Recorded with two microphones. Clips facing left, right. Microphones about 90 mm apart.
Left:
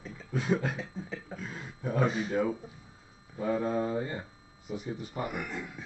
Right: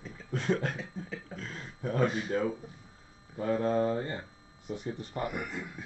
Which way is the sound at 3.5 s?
5° left (ahead or behind).